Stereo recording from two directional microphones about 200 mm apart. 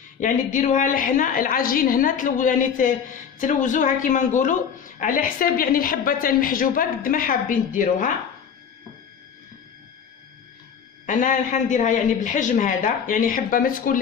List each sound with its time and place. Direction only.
0.2 s a woman's voice: 40° left (ahead or behind)
11.1 s a woman's voice: 40° left (ahead or behind)